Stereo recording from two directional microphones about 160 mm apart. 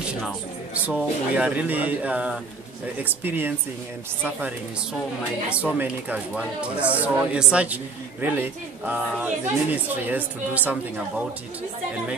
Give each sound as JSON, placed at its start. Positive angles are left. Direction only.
{"t": 0.0, "sound": "a sound", "side_deg": -5}
{"t": 0.8, "sound": "speech", "side_deg": -10}
{"t": 5.5, "sound": "speech", "side_deg": -10}